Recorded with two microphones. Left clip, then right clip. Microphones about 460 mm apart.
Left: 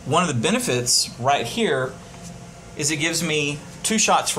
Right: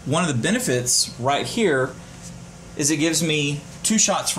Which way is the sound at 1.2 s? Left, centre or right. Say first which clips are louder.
Left 2 dB; left.